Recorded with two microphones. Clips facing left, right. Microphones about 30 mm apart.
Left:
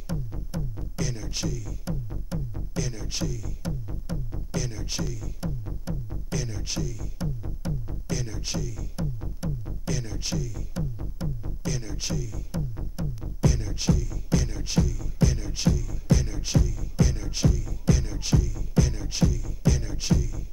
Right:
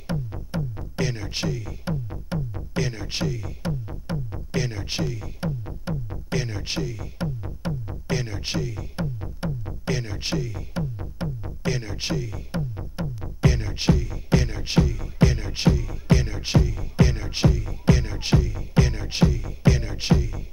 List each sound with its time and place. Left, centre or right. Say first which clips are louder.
0.1 s music: right 4 dB; right